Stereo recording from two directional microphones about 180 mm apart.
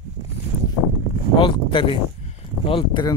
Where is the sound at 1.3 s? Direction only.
30° left (ahead or behind).